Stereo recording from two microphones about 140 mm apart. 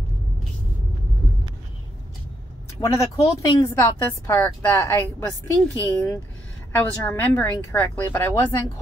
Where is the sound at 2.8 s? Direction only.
20° left (ahead or behind).